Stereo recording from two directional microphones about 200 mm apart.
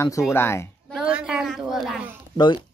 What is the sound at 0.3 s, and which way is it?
Speech, 10° left (ahead or behind).